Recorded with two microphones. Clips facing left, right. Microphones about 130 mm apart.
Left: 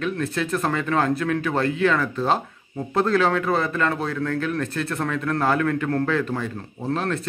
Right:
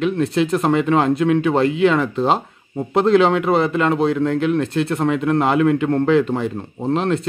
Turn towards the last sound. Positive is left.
turn(degrees=-25)  # may be behind; listen again after turning